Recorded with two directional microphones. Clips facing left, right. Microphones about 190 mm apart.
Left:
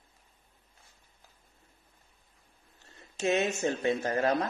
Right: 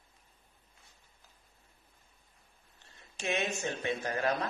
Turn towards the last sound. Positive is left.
turn(degrees=40)  # may be behind; listen again after turning